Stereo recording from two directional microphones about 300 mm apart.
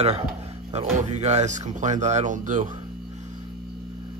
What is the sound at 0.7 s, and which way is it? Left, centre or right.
Speech, right.